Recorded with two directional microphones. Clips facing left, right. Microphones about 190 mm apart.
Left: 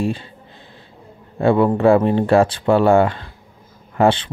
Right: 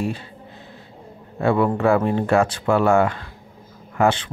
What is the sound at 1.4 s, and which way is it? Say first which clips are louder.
Speech: left 4 dB; 30° left (ahead or behind).